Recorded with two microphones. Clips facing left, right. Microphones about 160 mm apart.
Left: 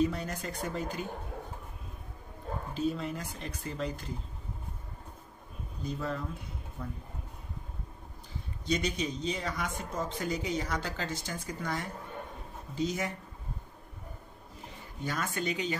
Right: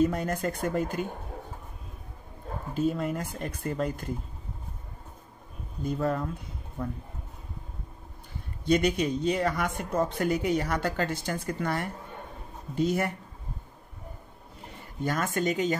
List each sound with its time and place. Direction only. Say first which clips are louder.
0.0 s speech: right 5 dB; 50° right (ahead or behind)
2.7 s speech: right 5 dB; 50° right (ahead or behind)
5.9 s speech: right 7 dB; 50° right (ahead or behind)
6.8 s speech: right 7 dB; 60° right (ahead or behind)
8.6 s speech: right 7 dB; 55° right (ahead or behind)
15.0 s speech: right 6 dB; 50° right (ahead or behind)